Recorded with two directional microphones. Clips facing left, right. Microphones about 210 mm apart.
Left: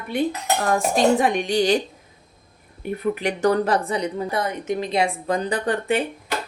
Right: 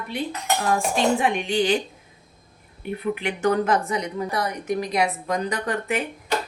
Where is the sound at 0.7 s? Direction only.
40° left (ahead or behind).